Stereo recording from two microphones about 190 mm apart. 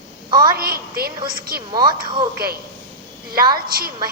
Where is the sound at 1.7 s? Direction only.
25° right (ahead or behind).